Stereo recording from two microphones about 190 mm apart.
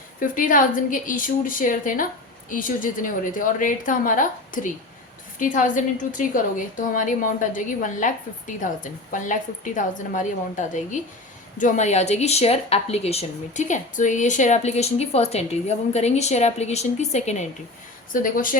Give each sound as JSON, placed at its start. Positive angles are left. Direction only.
{"t": 0.2, "sound": "a woman's voice", "side_deg": 45}
{"t": 18.1, "sound": "a woman's voice", "side_deg": 45}